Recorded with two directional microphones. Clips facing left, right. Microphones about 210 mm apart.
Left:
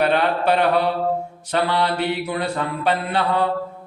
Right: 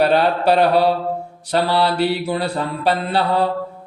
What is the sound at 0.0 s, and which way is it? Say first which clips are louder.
A man's voice: right 3 dB; 35° right (ahead or behind).